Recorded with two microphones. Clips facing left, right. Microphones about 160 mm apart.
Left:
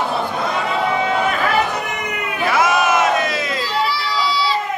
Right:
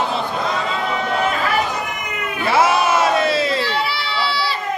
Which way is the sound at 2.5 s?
30° right (ahead or behind).